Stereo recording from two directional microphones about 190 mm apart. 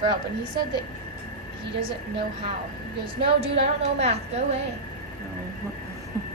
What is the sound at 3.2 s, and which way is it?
A woman's voice, 30° right (ahead or behind).